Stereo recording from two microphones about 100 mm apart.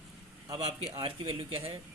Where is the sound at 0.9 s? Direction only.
60° right (ahead or behind).